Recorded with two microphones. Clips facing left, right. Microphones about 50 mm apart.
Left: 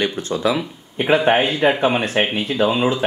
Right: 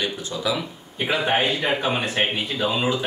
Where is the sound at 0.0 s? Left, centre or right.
Left.